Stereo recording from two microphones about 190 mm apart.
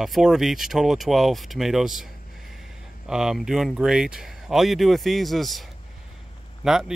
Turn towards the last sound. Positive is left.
turn(degrees=0)  # may be behind; listen again after turning